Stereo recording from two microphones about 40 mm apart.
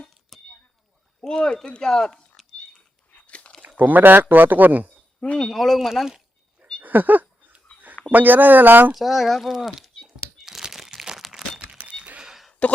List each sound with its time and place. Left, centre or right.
0.3 s a sound: centre
1.2 s speech: centre
3.2 s a sound: left
3.8 s speech: right
5.2 s speech: left
5.5 s speech: centre
6.8 s a sound: right
8.1 s speech: right
8.9 s speech: centre
10.3 s crumpling: centre
11.3 s crack: centre
12.6 s speech: left